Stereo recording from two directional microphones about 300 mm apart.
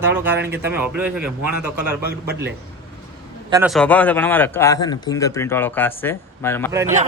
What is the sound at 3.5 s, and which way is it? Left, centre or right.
A man's voice, centre.